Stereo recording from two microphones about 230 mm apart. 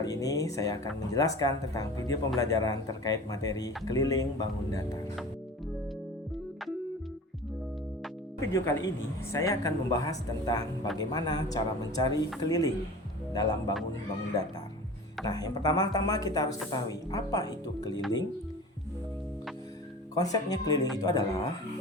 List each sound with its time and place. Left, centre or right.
0.0 s speech: centre
8.4 s speech: centre
15.2 s speech: centre
20.1 s speech: centre